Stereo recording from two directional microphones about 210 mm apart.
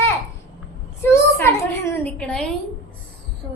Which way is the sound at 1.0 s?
10° left (ahead or behind).